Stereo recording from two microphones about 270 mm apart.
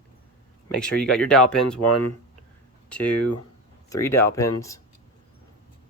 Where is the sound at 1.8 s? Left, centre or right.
Left.